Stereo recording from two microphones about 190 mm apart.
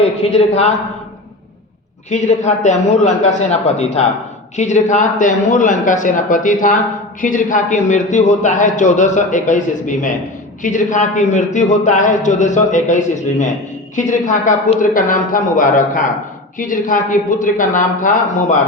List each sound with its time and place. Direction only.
0.2 s a man's voice: 35° left (ahead or behind)
2.0 s a man's voice: 40° left (ahead or behind)